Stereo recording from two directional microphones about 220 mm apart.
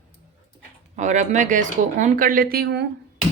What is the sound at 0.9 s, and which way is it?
Speech, 35° right (ahead or behind).